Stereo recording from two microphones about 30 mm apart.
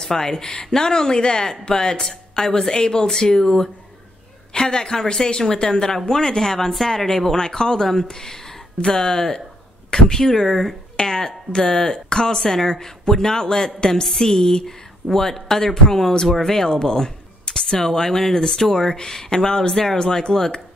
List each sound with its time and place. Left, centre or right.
0.0 s a woman's voice: centre
11.0 s speech: centre
12.4 s a man's voice: centre
17.8 s a man's voice: centre